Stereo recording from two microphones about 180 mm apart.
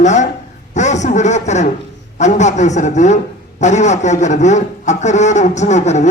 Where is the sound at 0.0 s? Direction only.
40° left (ahead or behind).